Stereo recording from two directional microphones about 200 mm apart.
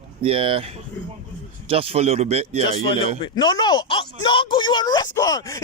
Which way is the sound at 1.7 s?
30° right (ahead or behind).